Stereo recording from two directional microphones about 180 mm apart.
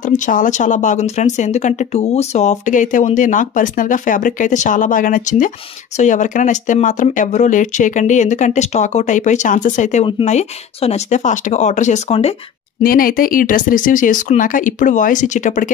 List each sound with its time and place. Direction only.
0.1 s speech: 45° left (ahead or behind)
12.8 s speech: 55° left (ahead or behind)